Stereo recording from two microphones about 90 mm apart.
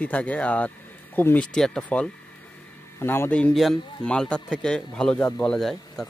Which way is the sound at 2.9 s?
25° left (ahead or behind).